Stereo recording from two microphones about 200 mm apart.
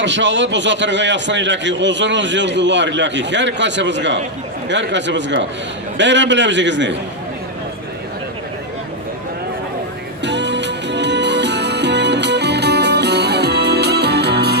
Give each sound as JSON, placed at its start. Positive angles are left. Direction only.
{"t": 0.0, "sound": "a man's voice", "side_deg": -65}
{"t": 10.2, "sound": "music", "side_deg": -60}